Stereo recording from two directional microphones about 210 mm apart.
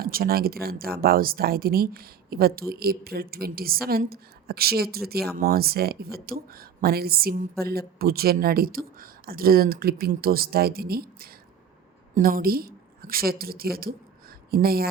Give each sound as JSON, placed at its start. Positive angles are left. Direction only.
{"t": 0.0, "sound": "a woman's voice", "side_deg": -45}